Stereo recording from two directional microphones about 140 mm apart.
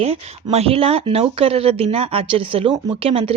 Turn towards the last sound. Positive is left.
turn(degrees=-40)  # may be behind; listen again after turning